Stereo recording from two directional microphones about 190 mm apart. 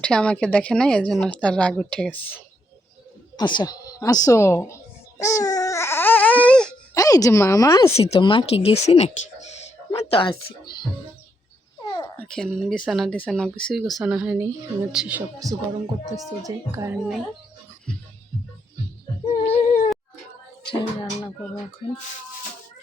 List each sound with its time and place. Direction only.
0.0 s speech: 5° left (ahead or behind)
3.3 s a sound: 20° left (ahead or behind); by 6.7 s 5° left (ahead or behind)
6.9 s speech: 20° left (ahead or behind)
7.9 s speech: 35° left (ahead or behind)
9.6 s a sound: 30° left (ahead or behind)
11.8 s a sound: 25° left (ahead or behind)
12.1 s a woman's voice: 5° left (ahead or behind)
16.4 s a woman's voice: 15° right (ahead or behind)
19.3 s female singing: 40° left (ahead or behind)
20.7 s speech: 25° left (ahead or behind)